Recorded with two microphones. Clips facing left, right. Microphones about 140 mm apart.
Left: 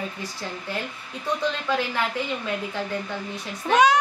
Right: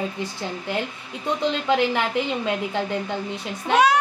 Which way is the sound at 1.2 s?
20° right (ahead or behind).